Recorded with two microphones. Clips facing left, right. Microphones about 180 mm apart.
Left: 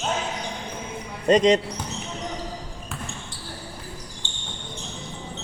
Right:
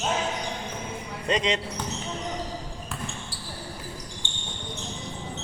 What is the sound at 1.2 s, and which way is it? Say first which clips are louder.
Speech: left 9 dB; 45° left (ahead or behind).